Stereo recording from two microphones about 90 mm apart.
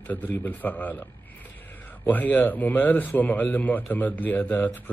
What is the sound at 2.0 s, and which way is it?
Speech, 20° left (ahead or behind).